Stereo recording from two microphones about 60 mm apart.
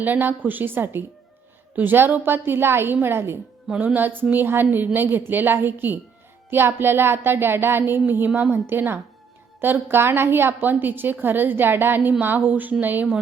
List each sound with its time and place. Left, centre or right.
0.0 s a woman's voice: right
3.7 s a woman's voice: right